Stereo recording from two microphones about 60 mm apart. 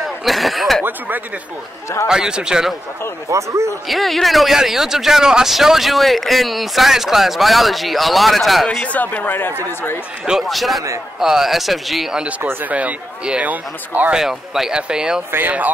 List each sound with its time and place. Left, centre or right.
0.0 s speech: centre
0.8 s speech: right
2.0 s speech: centre
3.3 s a man's voice: right
3.9 s speech: centre
8.6 s speech: left
10.5 s speech: centre
12.6 s speech: right
14.1 s speech: centre
15.3 s speech: right